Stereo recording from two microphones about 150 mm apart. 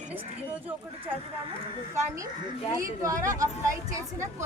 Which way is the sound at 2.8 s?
20° right (ahead or behind).